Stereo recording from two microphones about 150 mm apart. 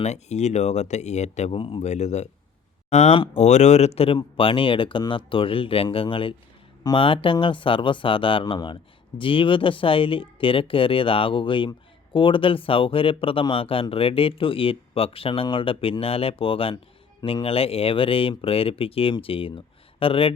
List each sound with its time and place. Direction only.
0.0 s speech: 50° left (ahead or behind)